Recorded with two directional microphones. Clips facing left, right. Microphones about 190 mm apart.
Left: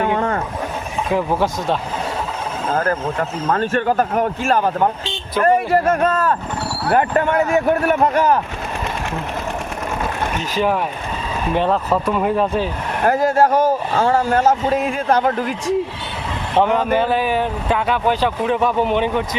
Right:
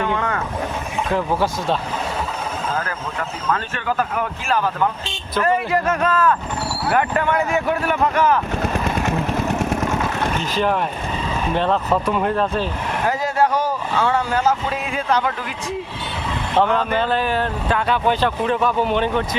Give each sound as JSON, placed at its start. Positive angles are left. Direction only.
{"t": 0.0, "sound": "vehicle", "side_deg": 50}
{"t": 2.7, "sound": "speech", "side_deg": 40}
{"t": 9.0, "sound": "vehicle", "side_deg": -45}
{"t": 10.5, "sound": "speech", "side_deg": 10}
{"t": 13.0, "sound": "speech", "side_deg": 55}
{"t": 16.6, "sound": "speech", "side_deg": 10}